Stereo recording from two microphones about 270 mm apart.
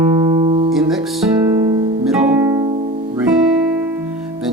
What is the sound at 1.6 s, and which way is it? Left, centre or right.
Music, centre.